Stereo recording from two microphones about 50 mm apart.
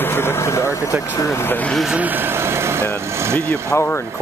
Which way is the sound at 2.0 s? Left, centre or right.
Right.